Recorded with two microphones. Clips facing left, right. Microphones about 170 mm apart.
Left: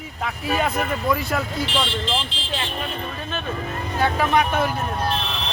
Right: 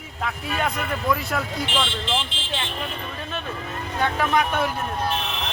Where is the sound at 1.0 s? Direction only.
Centre (ahead or behind).